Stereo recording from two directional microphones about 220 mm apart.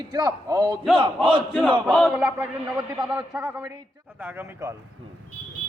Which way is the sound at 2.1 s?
10° right (ahead or behind).